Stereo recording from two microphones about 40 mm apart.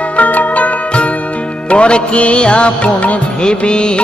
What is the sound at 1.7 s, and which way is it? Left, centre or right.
Music, left.